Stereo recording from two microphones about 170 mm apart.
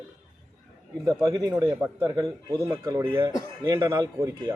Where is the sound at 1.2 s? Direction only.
20° right (ahead or behind).